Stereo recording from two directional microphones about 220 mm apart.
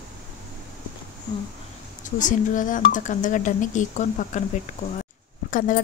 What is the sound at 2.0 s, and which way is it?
Speech, 35° left (ahead or behind).